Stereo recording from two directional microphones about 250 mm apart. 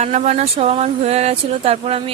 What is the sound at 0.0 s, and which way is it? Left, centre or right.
Speech, right.